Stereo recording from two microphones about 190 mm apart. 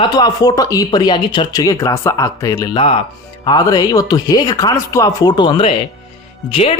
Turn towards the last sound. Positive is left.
turn(degrees=30)  # may be behind; listen again after turning